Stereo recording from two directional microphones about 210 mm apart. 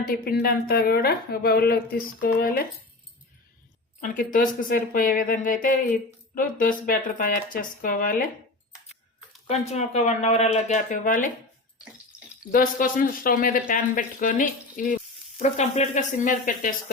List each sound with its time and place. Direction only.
0.1 s a woman's voice: 45° left (ahead or behind)
4.0 s a woman's voice: 40° left (ahead or behind)
9.5 s speech: 30° left (ahead or behind)
12.4 s speech: 40° left (ahead or behind)